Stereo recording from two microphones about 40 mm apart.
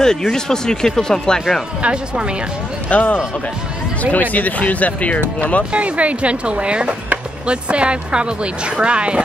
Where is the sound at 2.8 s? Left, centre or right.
Left.